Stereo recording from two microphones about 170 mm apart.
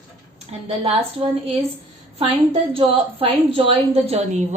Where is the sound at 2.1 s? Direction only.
35° right (ahead or behind).